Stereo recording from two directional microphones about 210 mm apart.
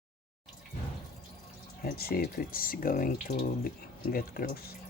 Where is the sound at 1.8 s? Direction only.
45° left (ahead or behind).